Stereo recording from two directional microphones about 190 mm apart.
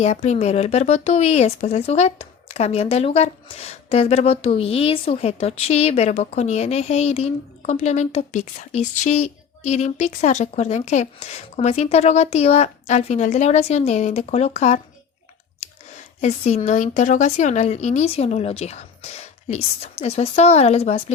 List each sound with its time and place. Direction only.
0.0 s speech: 35° left (ahead or behind)
16.2 s speech: 35° left (ahead or behind)